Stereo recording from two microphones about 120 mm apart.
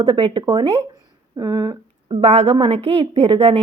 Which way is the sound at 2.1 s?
55° right (ahead or behind).